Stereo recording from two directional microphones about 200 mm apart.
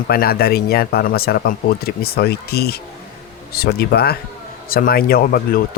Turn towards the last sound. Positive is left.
turn(degrees=50)  # may be behind; listen again after turning